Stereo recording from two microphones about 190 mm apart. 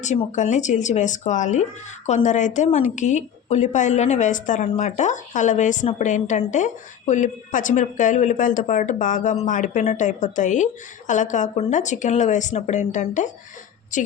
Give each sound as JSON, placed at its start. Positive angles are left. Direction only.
{"t": 0.0, "sound": "a woman's voice", "side_deg": 40}